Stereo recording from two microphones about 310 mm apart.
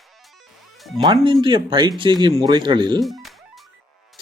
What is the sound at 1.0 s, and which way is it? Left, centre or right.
Speech, centre.